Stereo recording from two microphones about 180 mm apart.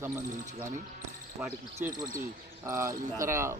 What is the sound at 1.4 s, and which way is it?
Speech, 10° right (ahead or behind).